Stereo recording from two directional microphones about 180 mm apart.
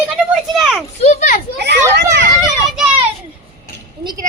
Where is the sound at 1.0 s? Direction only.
45° left (ahead or behind).